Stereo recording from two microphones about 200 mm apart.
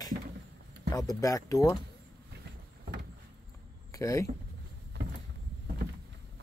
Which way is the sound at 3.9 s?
15° left (ahead or behind).